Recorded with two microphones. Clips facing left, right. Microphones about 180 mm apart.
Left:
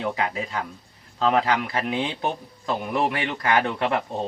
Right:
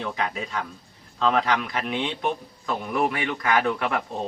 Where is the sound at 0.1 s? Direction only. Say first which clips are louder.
Left 2 dB; 25° left (ahead or behind).